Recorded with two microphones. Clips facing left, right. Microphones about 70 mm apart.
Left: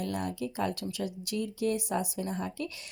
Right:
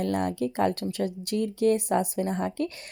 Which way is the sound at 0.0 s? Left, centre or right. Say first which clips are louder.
Right 7 dB; right.